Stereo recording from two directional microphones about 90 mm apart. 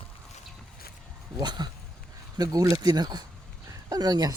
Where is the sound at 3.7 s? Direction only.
40° right (ahead or behind).